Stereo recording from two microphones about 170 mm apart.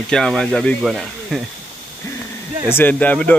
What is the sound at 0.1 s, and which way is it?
Speech, 5° left (ahead or behind).